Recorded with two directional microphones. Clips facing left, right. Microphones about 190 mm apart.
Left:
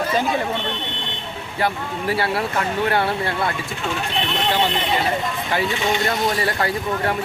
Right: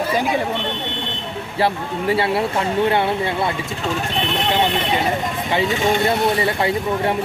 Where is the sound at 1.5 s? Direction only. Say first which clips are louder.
Right 3 dB; 25° right (ahead or behind).